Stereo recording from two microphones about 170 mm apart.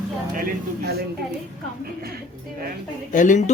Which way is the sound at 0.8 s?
70° right (ahead or behind).